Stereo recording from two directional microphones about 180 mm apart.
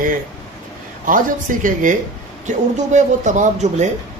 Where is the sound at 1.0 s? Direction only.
50° right (ahead or behind).